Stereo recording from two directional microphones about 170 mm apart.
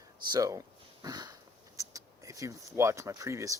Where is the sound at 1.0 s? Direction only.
25° right (ahead or behind).